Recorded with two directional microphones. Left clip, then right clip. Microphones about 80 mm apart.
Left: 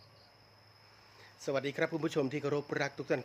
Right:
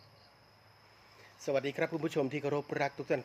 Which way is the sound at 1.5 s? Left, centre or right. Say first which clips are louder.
Right 1 dB; left.